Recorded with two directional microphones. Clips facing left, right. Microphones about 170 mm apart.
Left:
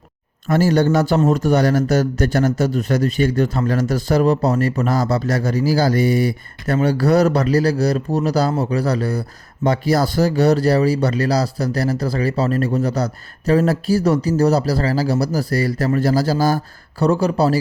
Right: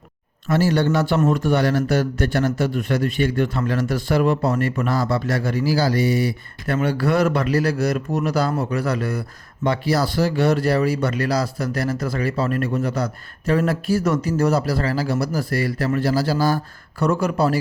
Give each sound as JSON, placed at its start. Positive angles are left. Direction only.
{"t": 0.4, "sound": "a man's voice", "side_deg": 45}
{"t": 6.7, "sound": "speech", "side_deg": 40}
{"t": 9.6, "sound": "speech", "side_deg": 45}